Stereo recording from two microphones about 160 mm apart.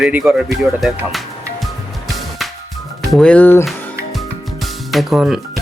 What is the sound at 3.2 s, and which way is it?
Speech, 10° left (ahead or behind).